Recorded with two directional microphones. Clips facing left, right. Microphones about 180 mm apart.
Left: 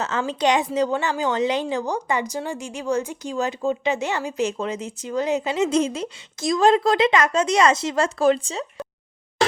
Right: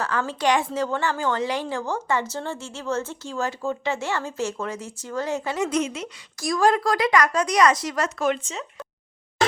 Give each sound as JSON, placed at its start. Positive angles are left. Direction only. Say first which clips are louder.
{"t": 0.0, "sound": "a woman's voice", "louder": "left 2 dB", "side_deg": 20}
{"t": 6.4, "sound": "a woman's voice", "louder": "left 3 dB", "side_deg": 20}